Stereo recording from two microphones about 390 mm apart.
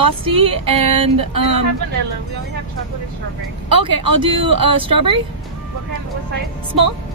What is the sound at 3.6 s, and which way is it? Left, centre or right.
Speech, right.